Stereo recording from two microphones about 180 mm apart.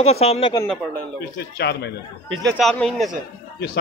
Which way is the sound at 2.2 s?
90° right.